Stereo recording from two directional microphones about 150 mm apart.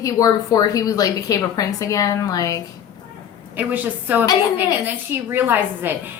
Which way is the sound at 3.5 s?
10° right (ahead or behind).